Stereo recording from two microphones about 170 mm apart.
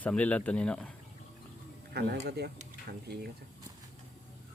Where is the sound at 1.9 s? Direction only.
75° right (ahead or behind).